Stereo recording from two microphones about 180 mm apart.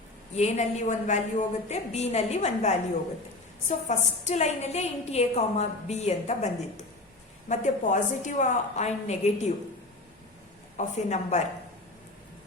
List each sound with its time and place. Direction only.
0.3 s a woman's voice: 40° left (ahead or behind)
10.8 s a woman's voice: 40° left (ahead or behind)